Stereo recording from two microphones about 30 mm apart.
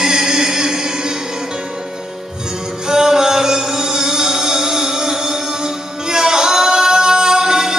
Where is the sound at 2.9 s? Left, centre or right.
Right.